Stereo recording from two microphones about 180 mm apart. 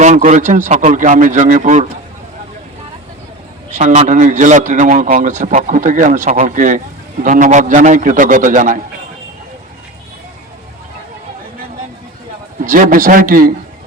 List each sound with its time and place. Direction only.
0.0 s speech: 40° right (ahead or behind)
3.8 s speech: 45° right (ahead or behind)
12.6 s speech: 50° right (ahead or behind)